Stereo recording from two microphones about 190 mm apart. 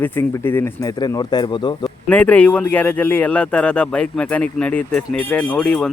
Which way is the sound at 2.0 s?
5° left (ahead or behind).